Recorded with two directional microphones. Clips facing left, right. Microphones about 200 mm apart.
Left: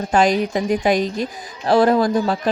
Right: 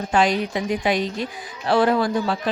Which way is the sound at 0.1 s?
45° left (ahead or behind).